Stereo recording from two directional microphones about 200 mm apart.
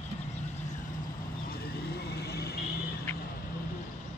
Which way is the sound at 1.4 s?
50° left (ahead or behind).